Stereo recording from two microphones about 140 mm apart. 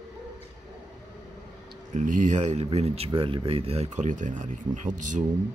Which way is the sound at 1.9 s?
65° right (ahead or behind).